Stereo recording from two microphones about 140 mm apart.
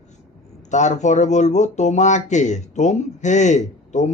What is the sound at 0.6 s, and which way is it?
Speech, 60° left (ahead or behind).